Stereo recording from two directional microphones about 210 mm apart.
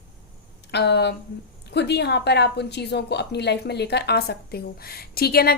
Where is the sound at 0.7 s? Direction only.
55° left (ahead or behind).